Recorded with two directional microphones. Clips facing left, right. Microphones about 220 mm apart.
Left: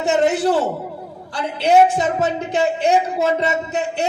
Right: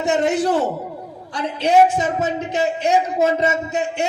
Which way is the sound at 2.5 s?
30° left (ahead or behind).